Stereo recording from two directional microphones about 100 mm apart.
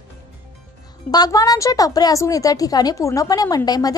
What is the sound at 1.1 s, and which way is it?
A woman's voice, 40° left (ahead or behind).